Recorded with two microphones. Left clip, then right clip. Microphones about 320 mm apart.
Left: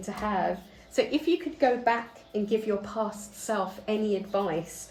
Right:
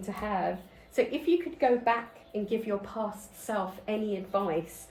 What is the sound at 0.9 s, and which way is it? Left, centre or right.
Speech, left.